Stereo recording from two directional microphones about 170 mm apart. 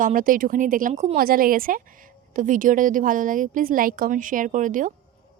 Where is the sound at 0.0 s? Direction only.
50° right (ahead or behind).